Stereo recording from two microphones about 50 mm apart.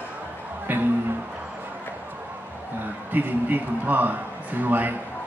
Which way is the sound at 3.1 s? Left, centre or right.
Right.